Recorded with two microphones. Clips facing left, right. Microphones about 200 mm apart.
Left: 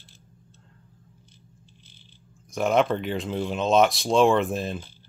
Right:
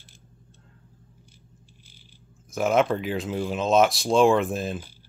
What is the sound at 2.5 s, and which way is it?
Speech, centre (ahead or behind).